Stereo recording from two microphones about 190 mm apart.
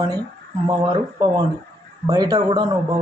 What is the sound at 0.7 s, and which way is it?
A man's voice, 20° right (ahead or behind).